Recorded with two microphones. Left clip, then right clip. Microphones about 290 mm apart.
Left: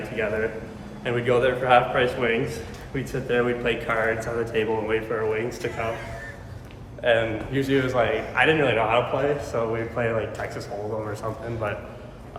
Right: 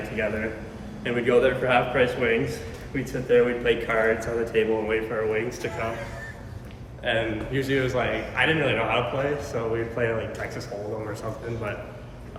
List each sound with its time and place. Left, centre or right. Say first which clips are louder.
0.2 s a man's voice: left 2 dB; centre
7.0 s a man's voice: left 4 dB; centre